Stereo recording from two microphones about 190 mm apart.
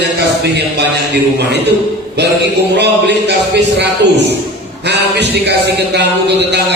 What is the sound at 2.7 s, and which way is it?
A man's voice, 65° right (ahead or behind).